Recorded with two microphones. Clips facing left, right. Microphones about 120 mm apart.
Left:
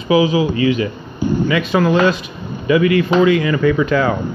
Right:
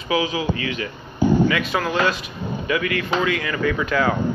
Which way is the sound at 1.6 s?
Centre (ahead or behind).